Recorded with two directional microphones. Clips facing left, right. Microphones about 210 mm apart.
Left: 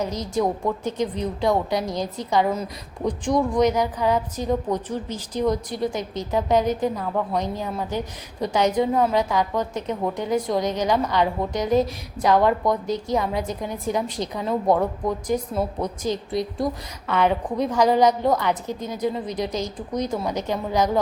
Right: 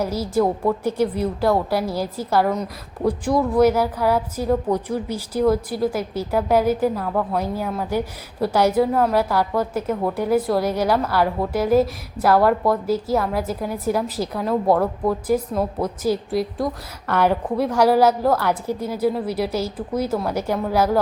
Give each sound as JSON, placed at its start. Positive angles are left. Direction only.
{"t": 0.0, "sound": "a woman's voice", "side_deg": -5}